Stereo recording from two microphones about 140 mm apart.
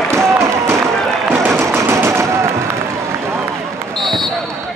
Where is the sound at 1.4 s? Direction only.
15° right (ahead or behind).